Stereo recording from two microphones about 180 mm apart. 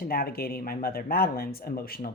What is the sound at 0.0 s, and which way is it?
Speech, 55° left (ahead or behind).